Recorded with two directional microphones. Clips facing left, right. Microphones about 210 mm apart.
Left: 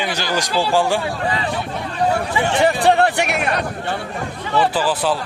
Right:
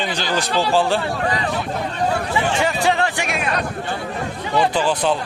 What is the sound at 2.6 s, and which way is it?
Speech, 60° left (ahead or behind).